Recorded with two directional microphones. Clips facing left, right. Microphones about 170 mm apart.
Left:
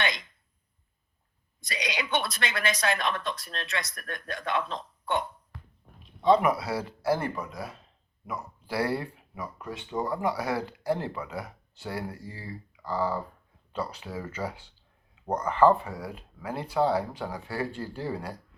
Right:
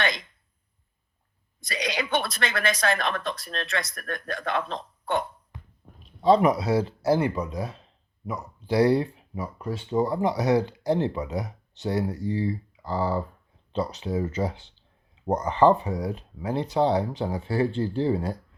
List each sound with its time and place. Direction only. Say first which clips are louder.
1.6 s speech: right 4 dB; 50° right (ahead or behind)
5.5 s beatboxing: right 2 dB; 20° right (ahead or behind)
6.2 s speech: right 3 dB; 30° right (ahead or behind)